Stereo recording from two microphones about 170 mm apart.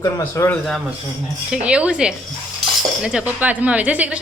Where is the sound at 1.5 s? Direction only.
5° right (ahead or behind).